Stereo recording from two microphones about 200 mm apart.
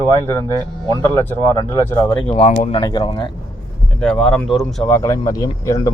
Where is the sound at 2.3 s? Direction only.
35° left (ahead or behind).